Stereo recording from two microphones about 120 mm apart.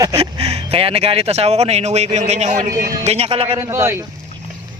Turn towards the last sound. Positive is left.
turn(degrees=-20)  # may be behind; listen again after turning